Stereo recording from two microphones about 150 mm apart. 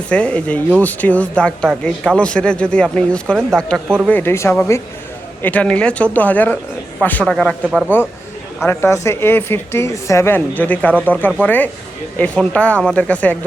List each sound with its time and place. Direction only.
0.1 s speech: 10° left (ahead or behind)
4.1 s speech: 15° left (ahead or behind)
8.6 s speech: 15° left (ahead or behind)